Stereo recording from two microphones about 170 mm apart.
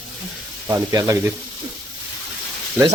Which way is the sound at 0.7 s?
20° right (ahead or behind).